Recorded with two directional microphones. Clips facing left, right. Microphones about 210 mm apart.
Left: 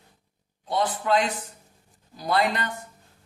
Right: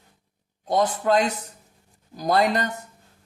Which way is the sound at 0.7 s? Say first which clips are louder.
Right 3 dB; 40° right (ahead or behind).